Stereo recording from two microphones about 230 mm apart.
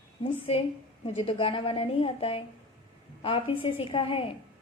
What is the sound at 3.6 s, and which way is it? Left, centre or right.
Speech, left.